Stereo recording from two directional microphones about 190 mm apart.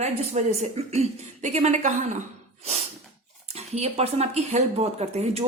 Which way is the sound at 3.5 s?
35° right (ahead or behind).